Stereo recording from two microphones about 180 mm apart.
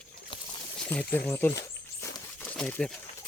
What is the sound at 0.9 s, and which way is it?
Speech, 10° left (ahead or behind).